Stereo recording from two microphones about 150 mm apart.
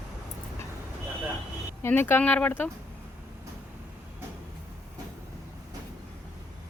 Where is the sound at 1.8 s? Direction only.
15° left (ahead or behind).